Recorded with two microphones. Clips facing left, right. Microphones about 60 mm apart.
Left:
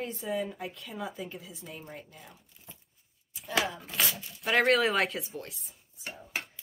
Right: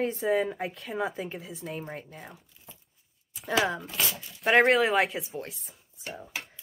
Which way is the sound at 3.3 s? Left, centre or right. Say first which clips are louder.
Right 4 dB; right.